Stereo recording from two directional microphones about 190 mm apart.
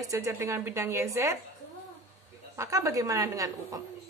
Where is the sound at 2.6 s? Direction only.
15° right (ahead or behind).